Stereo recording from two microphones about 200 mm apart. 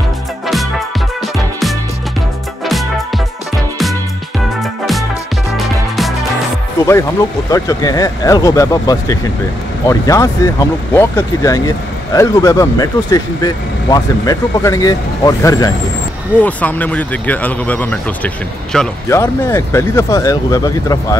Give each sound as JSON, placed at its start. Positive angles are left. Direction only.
{"t": 4.6, "sound": "music", "side_deg": 0}
{"t": 7.5, "sound": "speech", "side_deg": 15}